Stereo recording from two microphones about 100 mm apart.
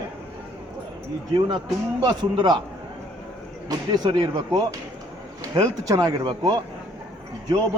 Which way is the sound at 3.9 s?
45° right (ahead or behind).